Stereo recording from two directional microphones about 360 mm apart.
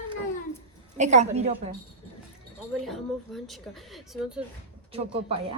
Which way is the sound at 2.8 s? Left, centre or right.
Centre.